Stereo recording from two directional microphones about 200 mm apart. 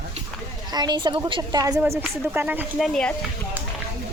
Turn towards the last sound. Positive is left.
turn(degrees=5)  # may be behind; listen again after turning